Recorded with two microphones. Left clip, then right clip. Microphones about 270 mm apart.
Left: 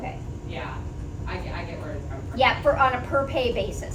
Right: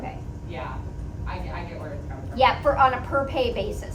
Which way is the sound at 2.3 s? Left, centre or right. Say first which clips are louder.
Right 1 dB; centre.